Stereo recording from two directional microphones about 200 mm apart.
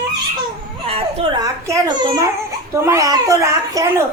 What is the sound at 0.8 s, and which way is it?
A child's voice, 30° right (ahead or behind).